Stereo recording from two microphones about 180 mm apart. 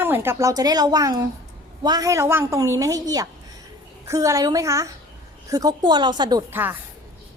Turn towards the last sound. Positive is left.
turn(degrees=-10)  # may be behind; listen again after turning